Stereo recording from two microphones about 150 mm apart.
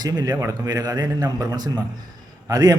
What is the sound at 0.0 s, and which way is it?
A man's voice, 25° right (ahead or behind).